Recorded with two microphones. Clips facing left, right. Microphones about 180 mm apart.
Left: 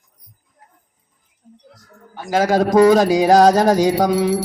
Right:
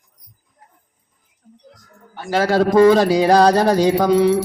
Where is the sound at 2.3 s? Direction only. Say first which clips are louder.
Even; 45° left (ahead or behind).